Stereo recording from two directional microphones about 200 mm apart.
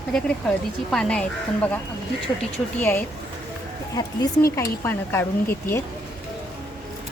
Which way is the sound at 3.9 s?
15° left (ahead or behind).